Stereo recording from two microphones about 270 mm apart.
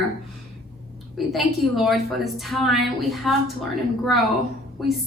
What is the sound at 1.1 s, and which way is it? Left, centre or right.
A woman's voice, centre.